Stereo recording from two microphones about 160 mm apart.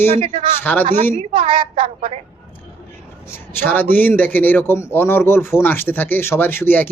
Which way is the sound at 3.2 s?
10° left (ahead or behind).